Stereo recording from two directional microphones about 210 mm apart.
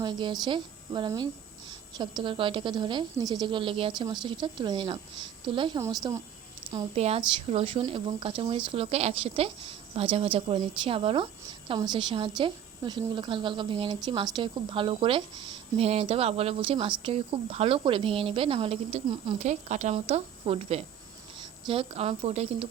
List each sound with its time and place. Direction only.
0.0 s a woman's voice: 20° right (ahead or behind)
6.7 s speech: 25° right (ahead or behind)